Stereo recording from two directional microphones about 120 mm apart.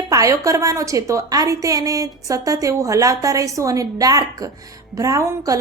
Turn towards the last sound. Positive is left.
turn(degrees=-25)  # may be behind; listen again after turning